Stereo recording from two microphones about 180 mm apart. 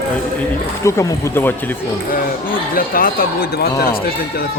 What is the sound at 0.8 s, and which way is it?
Speech, 15° left (ahead or behind).